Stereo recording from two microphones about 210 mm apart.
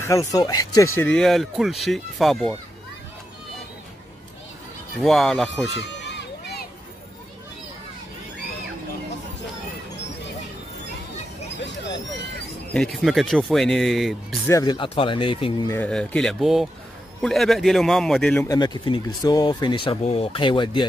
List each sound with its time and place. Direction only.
0.0 s speech: 15° left (ahead or behind)
0.9 s speech: 5° left (ahead or behind)
5.0 s speech: centre (ahead or behind)
5.8 s run: 55° left (ahead or behind)
12.7 s speech: centre (ahead or behind)
14.5 s speech: 20° left (ahead or behind)
15.8 s speech: 5° left (ahead or behind)
18.5 s speech: 20° left (ahead or behind)